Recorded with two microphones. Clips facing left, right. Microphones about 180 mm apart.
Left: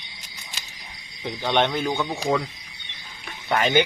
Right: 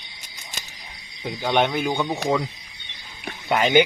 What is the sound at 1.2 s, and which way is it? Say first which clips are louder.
Speech: right 1 dB; 10° right (ahead or behind).